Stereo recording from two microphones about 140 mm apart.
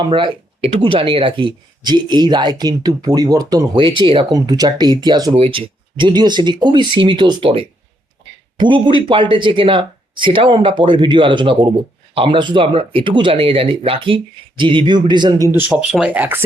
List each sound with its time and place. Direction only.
0.0 s speech: 35° right (ahead or behind)
5.3 s speech: 40° right (ahead or behind)
15.7 s speech: 5° right (ahead or behind)